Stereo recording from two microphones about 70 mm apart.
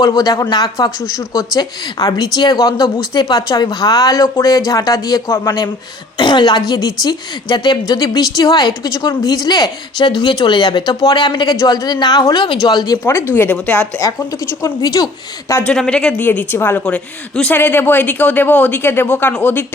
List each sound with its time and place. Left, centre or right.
0.0 s speech: left
1.5 s a woman's voice: left
6.1 s a woman's voice: left
11.6 s a woman's voice: left
13.3 s speech: left
14.6 s a woman's voice: left
15.6 s speech: centre
16.2 s a woman's voice: left
16.8 s speech: centre
17.6 s a woman's voice: left